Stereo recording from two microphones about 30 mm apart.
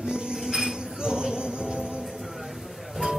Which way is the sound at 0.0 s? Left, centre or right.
Right.